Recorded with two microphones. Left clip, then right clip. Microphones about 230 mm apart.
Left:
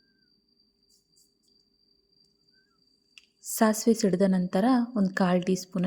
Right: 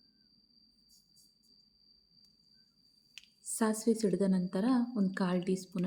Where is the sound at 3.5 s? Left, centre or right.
Left.